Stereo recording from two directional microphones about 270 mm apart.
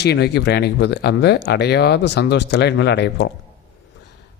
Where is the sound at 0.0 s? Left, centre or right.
Left.